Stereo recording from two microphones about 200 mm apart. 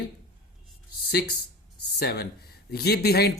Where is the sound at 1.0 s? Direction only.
55° left (ahead or behind).